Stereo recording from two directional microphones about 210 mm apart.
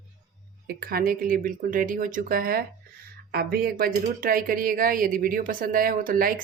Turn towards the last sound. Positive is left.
turn(degrees=-40)  # may be behind; listen again after turning